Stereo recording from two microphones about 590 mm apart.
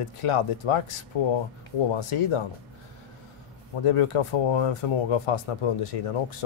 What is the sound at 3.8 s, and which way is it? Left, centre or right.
Speech, left.